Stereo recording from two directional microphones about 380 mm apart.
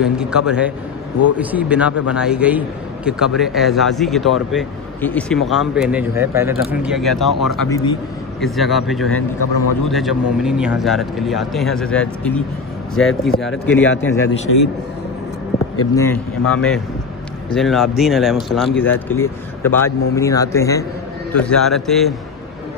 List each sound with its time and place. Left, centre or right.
0.0 s speech: centre
9.4 s a man's voice: left
9.8 s speech: centre
14.5 s a man's voice: left
15.9 s speech: centre